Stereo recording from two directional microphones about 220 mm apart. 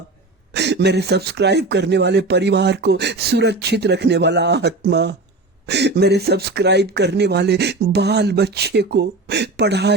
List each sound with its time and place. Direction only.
0.5 s speech: 50° right (ahead or behind)